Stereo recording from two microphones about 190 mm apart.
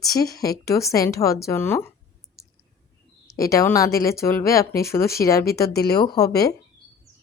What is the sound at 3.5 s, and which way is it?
A woman's voice, 15° left (ahead or behind).